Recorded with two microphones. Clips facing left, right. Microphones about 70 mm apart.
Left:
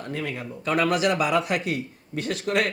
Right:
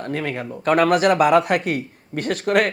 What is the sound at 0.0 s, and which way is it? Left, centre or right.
Speech, right.